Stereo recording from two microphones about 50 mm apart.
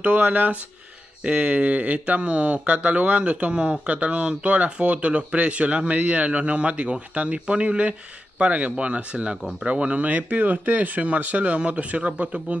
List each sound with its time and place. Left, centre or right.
0.0 s speech: right